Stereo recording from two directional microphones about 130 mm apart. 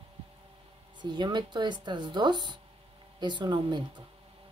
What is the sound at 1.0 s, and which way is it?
A woman's voice, 35° right (ahead or behind).